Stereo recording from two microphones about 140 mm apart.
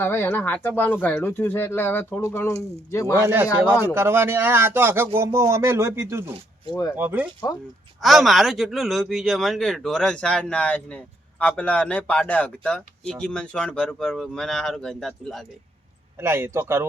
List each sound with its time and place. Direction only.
0.0 s speech: 15° left (ahead or behind)
3.2 s speech: 15° right (ahead or behind)
8.0 s speech: centre (ahead or behind)
16.1 s speech: 15° right (ahead or behind)